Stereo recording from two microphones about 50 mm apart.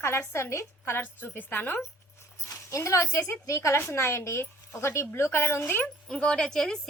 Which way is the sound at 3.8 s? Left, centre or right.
Left.